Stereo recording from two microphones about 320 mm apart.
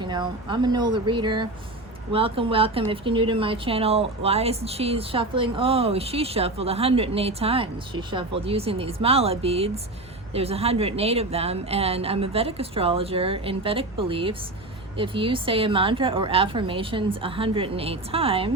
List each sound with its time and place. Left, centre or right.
0.0 s a woman's voice: centre